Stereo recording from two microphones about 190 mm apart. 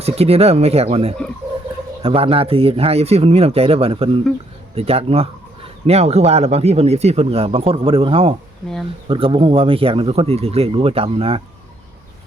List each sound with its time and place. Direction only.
0.0 s speech: 30° right (ahead or behind)